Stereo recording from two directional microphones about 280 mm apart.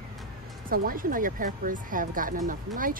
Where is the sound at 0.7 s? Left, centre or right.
Right.